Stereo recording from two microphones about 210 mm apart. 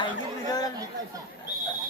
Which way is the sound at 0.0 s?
20° left (ahead or behind).